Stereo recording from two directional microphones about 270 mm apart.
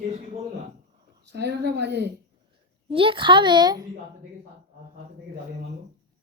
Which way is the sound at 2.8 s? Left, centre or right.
Centre.